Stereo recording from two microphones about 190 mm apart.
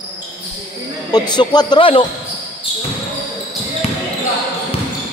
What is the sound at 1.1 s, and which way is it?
Speech, 20° left (ahead or behind).